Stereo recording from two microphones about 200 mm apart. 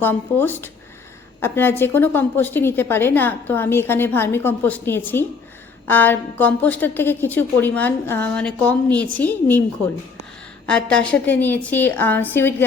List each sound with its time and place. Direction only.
0.0 s a woman's voice: 10° left (ahead or behind)